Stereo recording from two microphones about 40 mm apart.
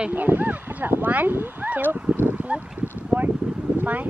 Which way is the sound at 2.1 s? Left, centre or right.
Right.